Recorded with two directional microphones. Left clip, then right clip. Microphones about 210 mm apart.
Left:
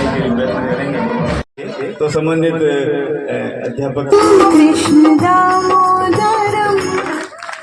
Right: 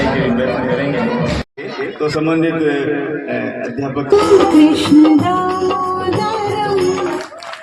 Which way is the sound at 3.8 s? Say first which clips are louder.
Left 2 dB; 30° left (ahead or behind).